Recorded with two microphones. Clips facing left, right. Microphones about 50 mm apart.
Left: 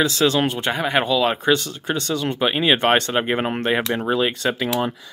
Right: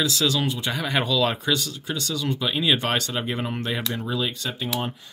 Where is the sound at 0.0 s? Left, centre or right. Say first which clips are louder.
Left 5 dB; left.